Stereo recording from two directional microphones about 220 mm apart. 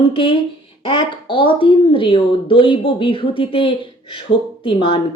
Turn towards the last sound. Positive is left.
turn(degrees=25)  # may be behind; listen again after turning